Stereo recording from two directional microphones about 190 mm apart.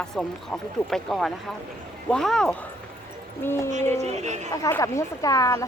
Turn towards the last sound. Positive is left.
turn(degrees=20)  # may be behind; listen again after turning